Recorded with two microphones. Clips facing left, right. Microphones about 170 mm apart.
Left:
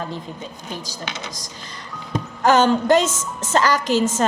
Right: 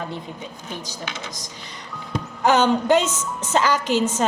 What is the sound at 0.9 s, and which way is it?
Speech, 90° left.